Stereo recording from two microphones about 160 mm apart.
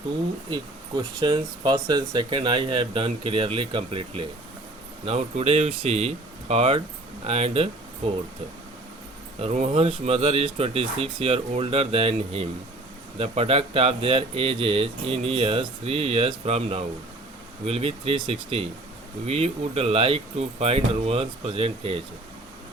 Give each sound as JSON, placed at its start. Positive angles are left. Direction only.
{"t": 0.5, "sound": "speech", "side_deg": -25}
{"t": 9.4, "sound": "speech", "side_deg": -40}